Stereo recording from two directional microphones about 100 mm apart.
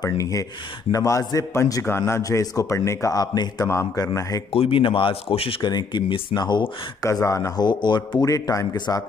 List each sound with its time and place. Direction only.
0.0 s a man's voice: 35° left (ahead or behind)
4.6 s speech: 65° left (ahead or behind)
5.6 s speech: 45° left (ahead or behind)
7.1 s a man's voice: 30° left (ahead or behind)
7.6 s speech: 50° left (ahead or behind)
8.3 s a man's voice: 35° left (ahead or behind)
8.7 s speech: 45° left (ahead or behind)